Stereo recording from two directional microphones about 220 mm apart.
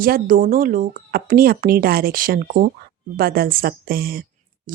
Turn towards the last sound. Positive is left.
turn(degrees=-40)  # may be behind; listen again after turning